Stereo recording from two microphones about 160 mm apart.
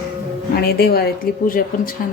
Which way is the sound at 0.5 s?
75° left (ahead or behind).